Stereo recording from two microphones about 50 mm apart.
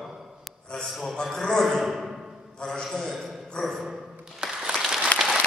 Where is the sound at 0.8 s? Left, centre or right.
Centre.